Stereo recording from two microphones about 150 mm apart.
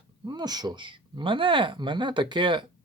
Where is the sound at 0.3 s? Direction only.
25° right (ahead or behind).